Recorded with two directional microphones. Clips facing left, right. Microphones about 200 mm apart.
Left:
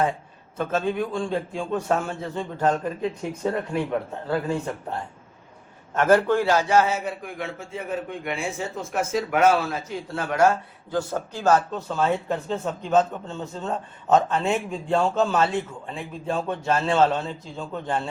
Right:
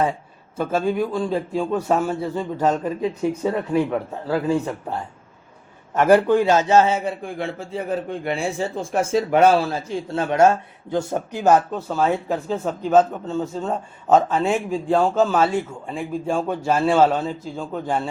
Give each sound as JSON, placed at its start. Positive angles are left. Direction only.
{"t": 0.5, "sound": "a man's voice", "side_deg": -10}